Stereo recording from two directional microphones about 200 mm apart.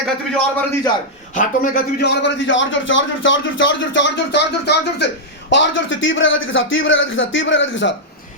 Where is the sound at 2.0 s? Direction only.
60° left (ahead or behind).